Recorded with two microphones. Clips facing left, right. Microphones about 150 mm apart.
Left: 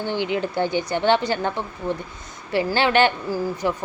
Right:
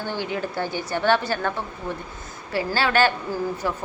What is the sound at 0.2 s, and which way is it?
A woman's voice, 20° left (ahead or behind).